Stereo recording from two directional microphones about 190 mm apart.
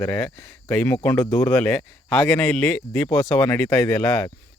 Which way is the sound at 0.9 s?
10° left (ahead or behind).